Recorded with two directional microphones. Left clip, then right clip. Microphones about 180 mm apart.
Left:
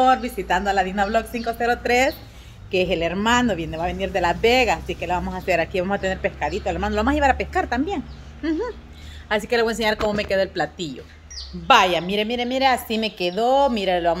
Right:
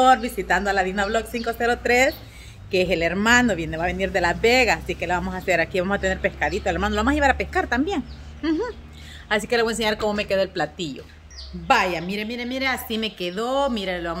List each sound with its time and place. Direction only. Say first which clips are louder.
0.0 s a woman's voice: right 1 dB; 5° right (ahead or behind)
4.2 s a woman's voice: left 1 dB; 5° left (ahead or behind); by 6.9 s 15° right (ahead or behind)
6.9 s a woman's voice: left 2 dB; 5° right (ahead or behind)